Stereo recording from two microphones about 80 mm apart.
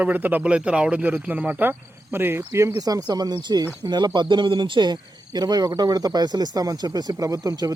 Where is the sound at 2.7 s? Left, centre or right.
Right.